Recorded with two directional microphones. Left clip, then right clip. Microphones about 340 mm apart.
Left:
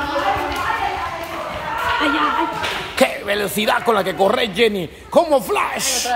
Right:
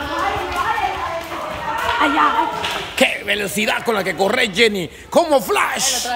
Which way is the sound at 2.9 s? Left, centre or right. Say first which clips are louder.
Even; centre.